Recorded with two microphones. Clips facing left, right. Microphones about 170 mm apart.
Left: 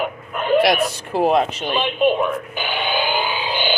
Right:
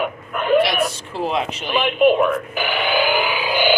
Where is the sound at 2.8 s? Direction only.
25° left (ahead or behind).